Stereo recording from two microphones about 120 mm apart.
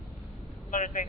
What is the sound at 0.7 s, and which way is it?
Vehicle, 90° left.